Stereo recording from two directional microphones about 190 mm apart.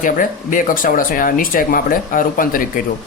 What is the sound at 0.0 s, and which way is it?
Speech, 45° left (ahead or behind).